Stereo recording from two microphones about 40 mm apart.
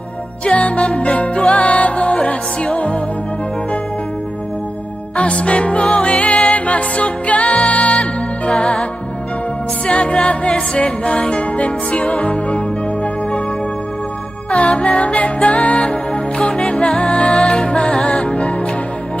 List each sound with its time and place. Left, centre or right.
0.5 s music: left
5.1 s music: left
9.8 s music: left
14.5 s music: left